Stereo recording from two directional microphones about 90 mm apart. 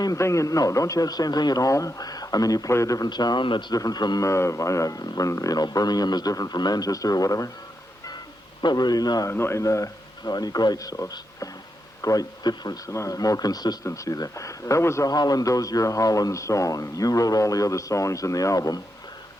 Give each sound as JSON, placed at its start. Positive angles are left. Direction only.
{"t": 0.0, "sound": "speech", "side_deg": 35}
{"t": 3.1, "sound": "a man's voice", "side_deg": 50}
{"t": 3.8, "sound": "a man's voice", "side_deg": 45}
{"t": 4.2, "sound": "a man's voice", "side_deg": 35}
{"t": 8.6, "sound": "a man's voice", "side_deg": 50}
{"t": 9.3, "sound": "a man's voice", "side_deg": 30}
{"t": 13.8, "sound": "speech", "side_deg": 35}
{"t": 15.0, "sound": "speech", "side_deg": 45}